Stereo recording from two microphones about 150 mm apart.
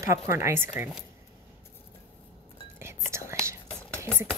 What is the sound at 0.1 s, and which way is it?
Speech, 20° right (ahead or behind).